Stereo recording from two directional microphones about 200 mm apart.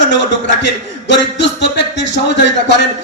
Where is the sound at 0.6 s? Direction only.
60° left (ahead or behind).